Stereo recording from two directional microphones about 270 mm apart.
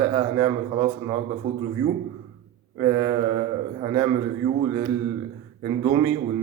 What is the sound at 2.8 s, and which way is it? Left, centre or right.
A man's voice, centre.